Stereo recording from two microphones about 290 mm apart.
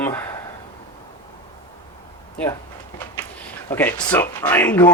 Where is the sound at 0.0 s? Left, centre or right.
Centre.